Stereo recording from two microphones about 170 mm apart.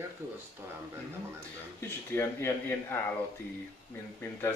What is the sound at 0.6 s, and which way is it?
Speech, 15° right (ahead or behind).